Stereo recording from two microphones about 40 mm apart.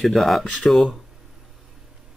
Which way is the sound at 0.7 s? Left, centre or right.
Left.